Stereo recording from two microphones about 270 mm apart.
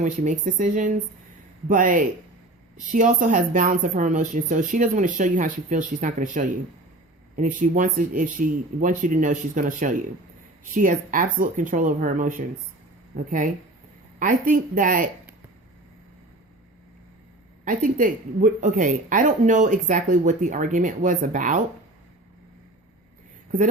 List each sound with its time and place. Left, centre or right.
0.0 s speech: right
17.7 s speech: right